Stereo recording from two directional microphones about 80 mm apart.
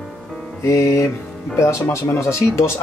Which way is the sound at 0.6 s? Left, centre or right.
Left.